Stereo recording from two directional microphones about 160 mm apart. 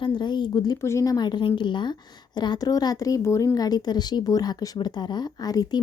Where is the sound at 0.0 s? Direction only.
30° left (ahead or behind).